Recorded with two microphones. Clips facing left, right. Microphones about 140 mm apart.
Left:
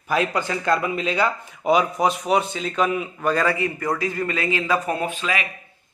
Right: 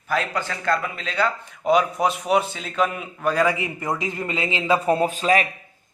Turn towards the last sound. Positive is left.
turn(degrees=-40)  # may be behind; listen again after turning